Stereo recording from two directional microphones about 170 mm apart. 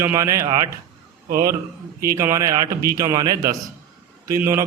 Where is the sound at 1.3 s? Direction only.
60° right (ahead or behind).